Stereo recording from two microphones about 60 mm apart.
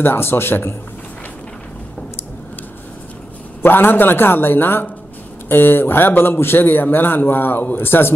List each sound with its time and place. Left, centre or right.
0.0 s a man's voice: left
3.6 s a man's voice: left